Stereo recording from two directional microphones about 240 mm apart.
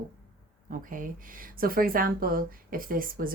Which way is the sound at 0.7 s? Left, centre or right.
Right.